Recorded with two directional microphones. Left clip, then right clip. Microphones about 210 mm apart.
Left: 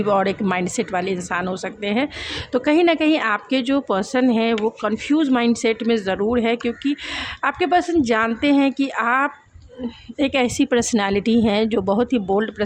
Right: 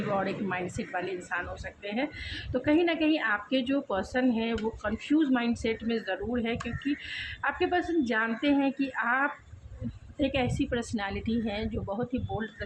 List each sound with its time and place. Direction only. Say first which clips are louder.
0.1 s a woman's voice: left 11 dB; 50° left (ahead or behind)